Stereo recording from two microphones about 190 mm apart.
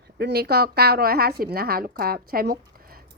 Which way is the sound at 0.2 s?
60° right (ahead or behind).